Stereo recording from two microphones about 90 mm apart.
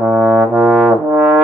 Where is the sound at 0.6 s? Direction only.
10° right (ahead or behind).